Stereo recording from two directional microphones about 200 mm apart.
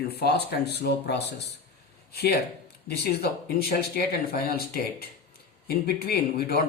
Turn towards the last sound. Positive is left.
turn(degrees=50)  # may be behind; listen again after turning